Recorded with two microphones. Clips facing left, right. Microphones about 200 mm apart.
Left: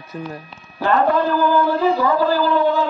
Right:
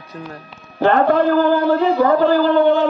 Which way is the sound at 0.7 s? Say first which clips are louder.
Right 3 dB; 60° right (ahead or behind).